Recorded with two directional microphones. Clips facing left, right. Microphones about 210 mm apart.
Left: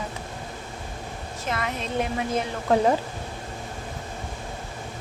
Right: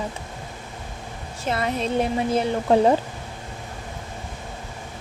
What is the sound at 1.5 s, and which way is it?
Speech, 30° right (ahead or behind).